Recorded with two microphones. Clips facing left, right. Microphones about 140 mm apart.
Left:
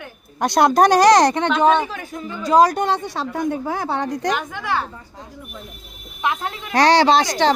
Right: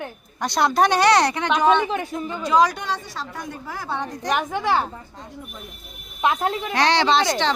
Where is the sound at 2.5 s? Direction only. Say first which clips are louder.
Left 5 dB; 45° left (ahead or behind); by 4.3 s 75° left (ahead or behind).